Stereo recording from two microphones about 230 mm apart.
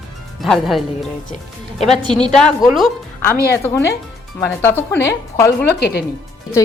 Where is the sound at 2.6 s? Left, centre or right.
Centre.